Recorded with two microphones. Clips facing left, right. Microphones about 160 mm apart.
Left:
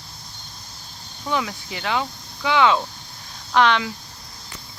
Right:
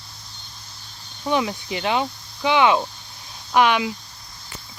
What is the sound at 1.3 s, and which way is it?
Speech, 20° right (ahead or behind).